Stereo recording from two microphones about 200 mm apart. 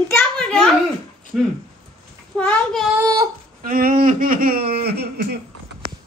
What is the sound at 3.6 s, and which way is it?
Speech, 45° right (ahead or behind).